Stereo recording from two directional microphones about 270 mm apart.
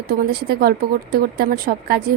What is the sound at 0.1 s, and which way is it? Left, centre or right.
Speech, right.